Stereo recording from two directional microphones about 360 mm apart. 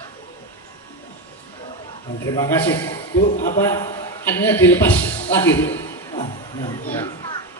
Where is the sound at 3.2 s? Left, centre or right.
Centre.